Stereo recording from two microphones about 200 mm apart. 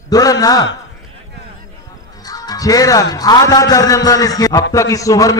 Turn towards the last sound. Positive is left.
turn(degrees=15)  # may be behind; listen again after turning